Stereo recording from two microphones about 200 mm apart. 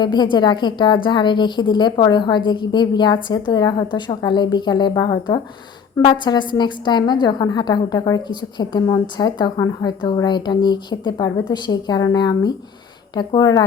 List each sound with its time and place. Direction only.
0.0 s a woman's voice: 20° left (ahead or behind)